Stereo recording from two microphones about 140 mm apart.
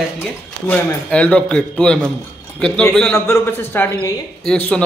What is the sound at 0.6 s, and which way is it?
A man's voice, 10° left (ahead or behind).